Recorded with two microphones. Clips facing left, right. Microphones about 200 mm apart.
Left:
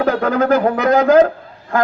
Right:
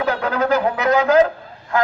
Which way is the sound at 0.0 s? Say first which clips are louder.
Left 4 dB; 55° left (ahead or behind).